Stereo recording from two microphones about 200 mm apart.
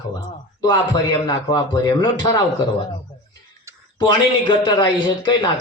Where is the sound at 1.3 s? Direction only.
20° left (ahead or behind).